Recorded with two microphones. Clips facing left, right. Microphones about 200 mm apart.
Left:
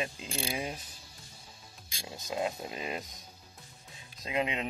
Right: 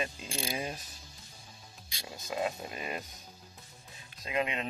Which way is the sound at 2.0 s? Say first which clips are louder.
Even; 20° left (ahead or behind).